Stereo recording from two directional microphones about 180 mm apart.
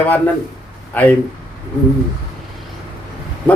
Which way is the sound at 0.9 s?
10° left (ahead or behind).